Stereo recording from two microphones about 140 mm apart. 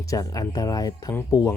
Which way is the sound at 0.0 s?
25° left (ahead or behind).